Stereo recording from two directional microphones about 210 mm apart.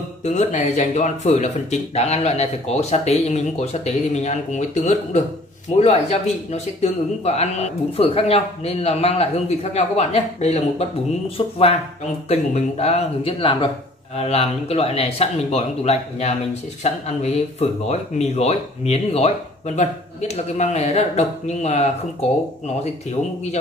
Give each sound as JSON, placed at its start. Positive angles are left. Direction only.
{"t": 0.2, "sound": "a man's voice", "side_deg": 35}